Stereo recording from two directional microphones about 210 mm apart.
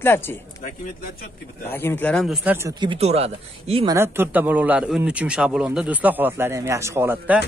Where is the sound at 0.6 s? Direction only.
40° left (ahead or behind).